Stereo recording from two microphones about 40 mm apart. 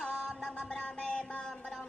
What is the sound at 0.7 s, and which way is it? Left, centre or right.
Music, left.